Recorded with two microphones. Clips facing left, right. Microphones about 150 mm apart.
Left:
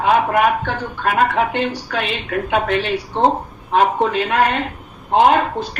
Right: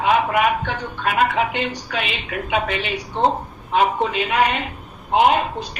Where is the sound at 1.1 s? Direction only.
60° left (ahead or behind).